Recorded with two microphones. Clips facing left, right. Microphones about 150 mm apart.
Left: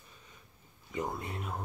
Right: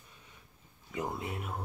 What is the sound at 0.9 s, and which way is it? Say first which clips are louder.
Speech: even; 10° right (ahead or behind).